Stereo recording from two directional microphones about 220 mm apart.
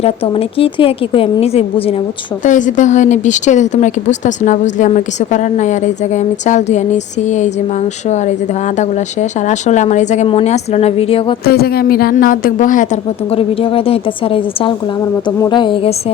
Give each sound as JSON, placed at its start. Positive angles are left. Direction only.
{"t": 0.0, "sound": "a woman's voice", "side_deg": 25}
{"t": 9.5, "sound": "a woman's voice", "side_deg": 30}
{"t": 11.4, "sound": "a woman's voice", "side_deg": 45}
{"t": 13.3, "sound": "a woman's voice", "side_deg": 25}